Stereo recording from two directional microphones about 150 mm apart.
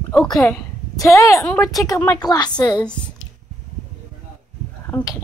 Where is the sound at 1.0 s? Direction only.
20° left (ahead or behind).